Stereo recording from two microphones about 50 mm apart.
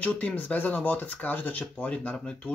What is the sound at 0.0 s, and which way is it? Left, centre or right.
Speech, left.